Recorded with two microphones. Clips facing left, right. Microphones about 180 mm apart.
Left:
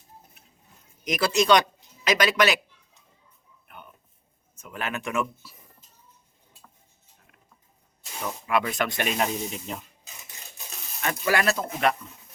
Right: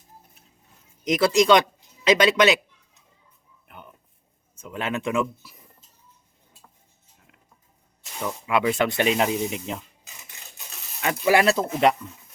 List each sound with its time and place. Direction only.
1.0 s speech: 25° right (ahead or behind)
4.5 s speech: 25° right (ahead or behind)
8.4 s speech: 20° right (ahead or behind)
11.0 s speech: 20° right (ahead or behind)